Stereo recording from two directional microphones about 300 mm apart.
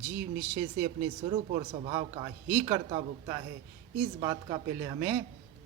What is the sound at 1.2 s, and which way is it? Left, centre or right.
Speech, right.